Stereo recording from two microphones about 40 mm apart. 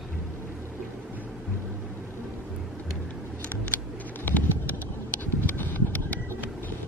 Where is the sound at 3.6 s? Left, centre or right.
Left.